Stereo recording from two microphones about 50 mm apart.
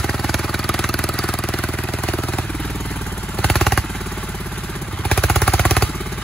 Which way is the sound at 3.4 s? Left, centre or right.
Centre.